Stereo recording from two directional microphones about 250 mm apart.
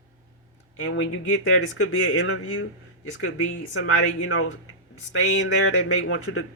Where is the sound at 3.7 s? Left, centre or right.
Left.